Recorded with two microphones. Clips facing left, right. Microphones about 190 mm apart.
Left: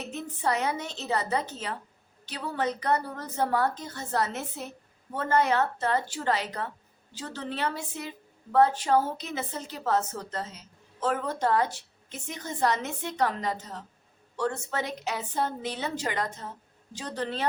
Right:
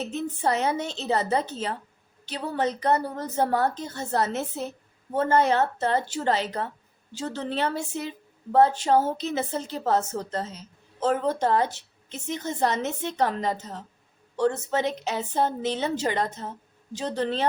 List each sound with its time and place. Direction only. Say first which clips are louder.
0.0 s a woman's voice: right 4 dB; 30° right (ahead or behind)